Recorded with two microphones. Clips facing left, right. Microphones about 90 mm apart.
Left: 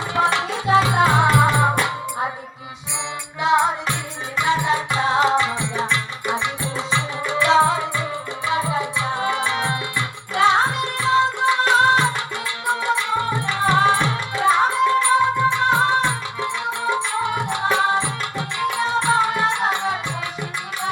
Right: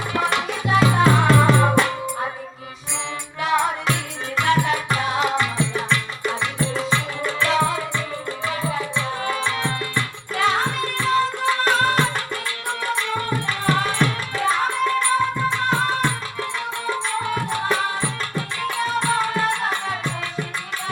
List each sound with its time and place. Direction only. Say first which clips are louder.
0.1 s music: left 3 dB; 25° left (ahead or behind)
3.4 s music: left 3 dB; 20° left (ahead or behind)